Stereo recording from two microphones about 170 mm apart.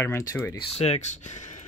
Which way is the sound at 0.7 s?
35° left (ahead or behind).